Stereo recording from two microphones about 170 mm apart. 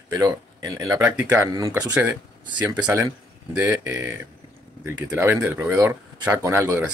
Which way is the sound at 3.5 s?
10° right (ahead or behind).